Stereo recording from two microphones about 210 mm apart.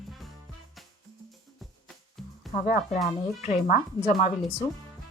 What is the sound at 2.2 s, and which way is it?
Music, centre (ahead or behind).